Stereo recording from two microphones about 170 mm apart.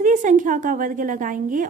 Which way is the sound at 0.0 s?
50° right (ahead or behind).